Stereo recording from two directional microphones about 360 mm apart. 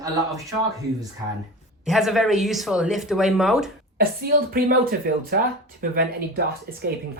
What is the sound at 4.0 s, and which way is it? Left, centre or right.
A woman's voice, right.